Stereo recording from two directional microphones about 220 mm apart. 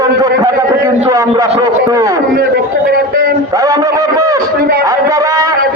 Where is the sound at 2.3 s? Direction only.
45° right (ahead or behind).